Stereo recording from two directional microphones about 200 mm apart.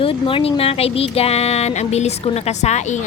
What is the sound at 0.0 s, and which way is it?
A woman's voice, 25° left (ahead or behind).